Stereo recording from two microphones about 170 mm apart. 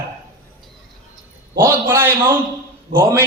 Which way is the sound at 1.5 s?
15° right (ahead or behind).